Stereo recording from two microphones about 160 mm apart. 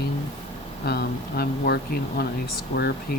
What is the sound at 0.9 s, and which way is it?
Speech, 90° left.